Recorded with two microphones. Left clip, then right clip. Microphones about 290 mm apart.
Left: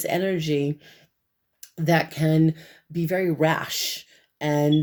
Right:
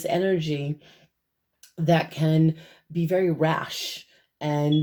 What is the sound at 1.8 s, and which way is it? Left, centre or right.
Speech, left.